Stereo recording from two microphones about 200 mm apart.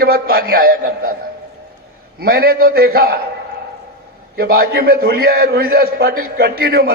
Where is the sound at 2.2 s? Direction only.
50° right (ahead or behind).